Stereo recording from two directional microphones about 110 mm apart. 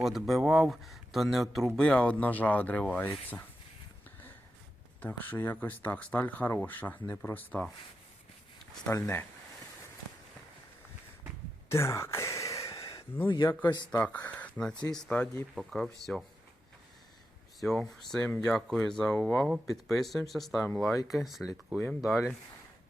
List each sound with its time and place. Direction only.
0.0 s speech: centre (ahead or behind); by 3.4 s 15° left (ahead or behind)
4.9 s speech: 15° left (ahead or behind)
8.9 s speech: 25° left (ahead or behind)
11.7 s a sound: 25° left (ahead or behind)
13.2 s speech: 40° left (ahead or behind)
14.0 s speech: 15° left (ahead or behind)
15.5 s speech: 5° left (ahead or behind)
17.6 s speech: 5° left (ahead or behind)